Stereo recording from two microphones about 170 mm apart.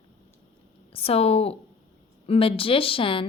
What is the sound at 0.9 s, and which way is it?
A woman's voice, 35° left (ahead or behind).